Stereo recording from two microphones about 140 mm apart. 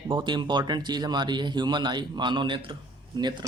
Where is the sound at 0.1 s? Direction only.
30° right (ahead or behind).